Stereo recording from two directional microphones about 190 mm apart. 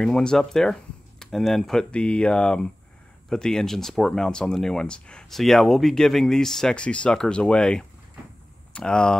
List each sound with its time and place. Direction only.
0.0 s speech: 5° left (ahead or behind)